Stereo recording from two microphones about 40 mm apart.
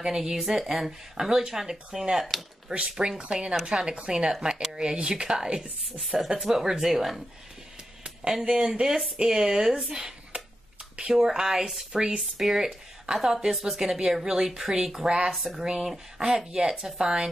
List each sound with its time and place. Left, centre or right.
0.0 s a woman's voice: centre
2.7 s speech: centre
3.3 s speech: right
4.3 s speech: centre
5.9 s a woman's voice: centre
8.3 s a woman's voice: centre
8.5 s a woman's voice: right
9.9 s a sound: right
11.1 s a woman's voice: centre
12.2 s a woman's voice: centre
15.3 s speech: centre
15.6 s a woman's voice: centre